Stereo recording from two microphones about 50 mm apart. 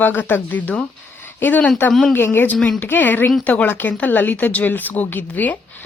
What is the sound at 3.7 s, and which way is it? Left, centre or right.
Speech, left.